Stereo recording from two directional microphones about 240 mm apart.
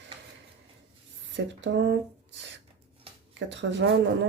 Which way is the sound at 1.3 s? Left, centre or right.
Right.